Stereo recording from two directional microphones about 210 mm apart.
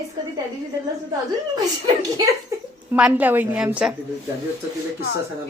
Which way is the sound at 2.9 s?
10° right (ahead or behind).